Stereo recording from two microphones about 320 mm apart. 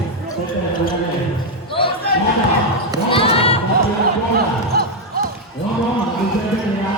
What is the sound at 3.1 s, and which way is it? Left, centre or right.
Basketball bounce, centre.